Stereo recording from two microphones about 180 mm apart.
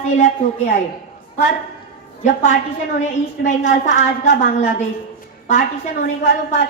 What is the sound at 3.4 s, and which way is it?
A woman's voice, 45° left (ahead or behind).